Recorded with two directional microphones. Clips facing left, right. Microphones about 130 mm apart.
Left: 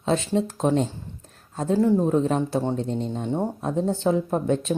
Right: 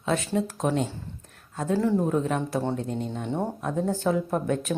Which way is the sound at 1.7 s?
20° left (ahead or behind).